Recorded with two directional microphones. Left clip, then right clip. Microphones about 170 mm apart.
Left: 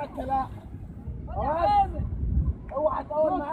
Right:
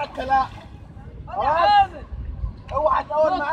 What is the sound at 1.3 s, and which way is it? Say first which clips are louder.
Speech: right 7 dB; 25° right (ahead or behind).